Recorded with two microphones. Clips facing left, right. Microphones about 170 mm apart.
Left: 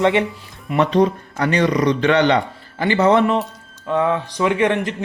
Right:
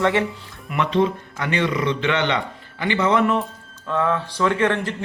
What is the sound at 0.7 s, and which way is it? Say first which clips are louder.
A man's voice: left 4 dB; 40° left (ahead or behind).